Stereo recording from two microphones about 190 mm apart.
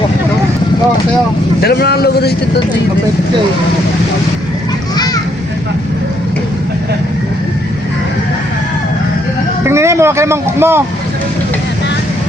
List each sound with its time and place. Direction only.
1.6 s a man's voice: 55° left (ahead or behind)
9.6 s speech: 15° right (ahead or behind)